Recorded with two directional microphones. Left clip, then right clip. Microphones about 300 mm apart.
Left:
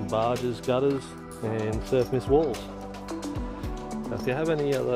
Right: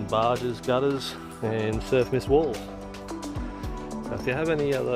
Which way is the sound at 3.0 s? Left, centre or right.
Centre.